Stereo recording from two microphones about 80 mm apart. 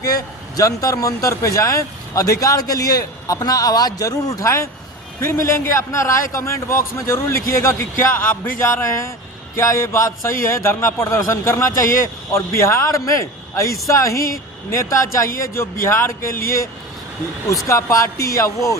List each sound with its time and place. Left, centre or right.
0.0 s a man's voice: left
17.7 s a man's voice: left